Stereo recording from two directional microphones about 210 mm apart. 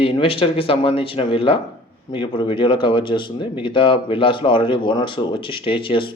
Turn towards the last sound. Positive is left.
turn(degrees=25)  # may be behind; listen again after turning